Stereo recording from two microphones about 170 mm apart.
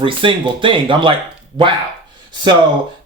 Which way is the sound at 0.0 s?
30° right (ahead or behind).